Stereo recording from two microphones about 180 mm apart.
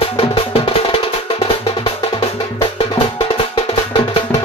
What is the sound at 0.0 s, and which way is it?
Music, 30° left (ahead or behind).